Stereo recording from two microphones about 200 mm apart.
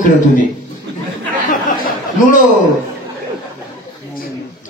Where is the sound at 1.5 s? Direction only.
40° left (ahead or behind).